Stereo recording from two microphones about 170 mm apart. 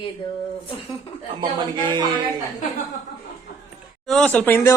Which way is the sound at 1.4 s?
25° right (ahead or behind).